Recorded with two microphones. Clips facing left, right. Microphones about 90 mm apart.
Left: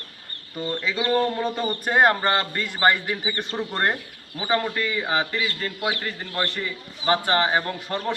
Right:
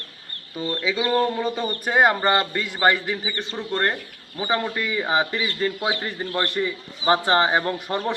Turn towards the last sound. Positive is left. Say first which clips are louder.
# right 2 dB
turn(degrees=-20)  # may be behind; listen again after turning